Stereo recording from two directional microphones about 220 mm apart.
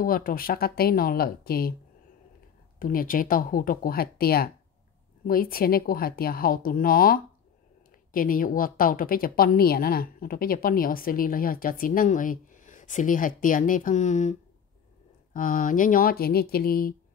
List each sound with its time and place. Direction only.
0.0 s speech: 40° left (ahead or behind)
2.8 s a woman's voice: 40° left (ahead or behind)
15.3 s a woman's voice: 40° left (ahead or behind)